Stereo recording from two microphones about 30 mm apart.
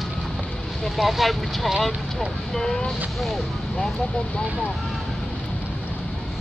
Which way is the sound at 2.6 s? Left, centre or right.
Centre.